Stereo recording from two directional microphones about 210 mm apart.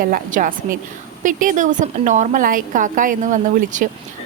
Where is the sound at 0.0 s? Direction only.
40° right (ahead or behind).